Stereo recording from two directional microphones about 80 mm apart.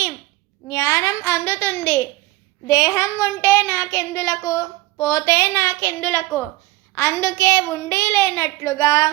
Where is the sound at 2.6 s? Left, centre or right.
Left.